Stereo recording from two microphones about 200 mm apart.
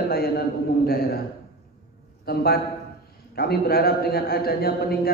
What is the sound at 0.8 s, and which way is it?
Speech, 50° left (ahead or behind).